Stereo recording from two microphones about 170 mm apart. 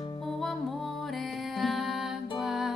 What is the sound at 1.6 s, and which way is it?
Music, centre (ahead or behind).